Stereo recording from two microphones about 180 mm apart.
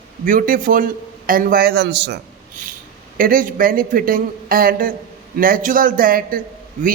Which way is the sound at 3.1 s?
50° right (ahead or behind).